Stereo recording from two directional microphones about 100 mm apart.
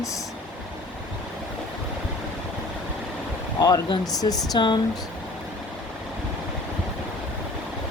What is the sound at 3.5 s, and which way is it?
Speech, 35° left (ahead or behind).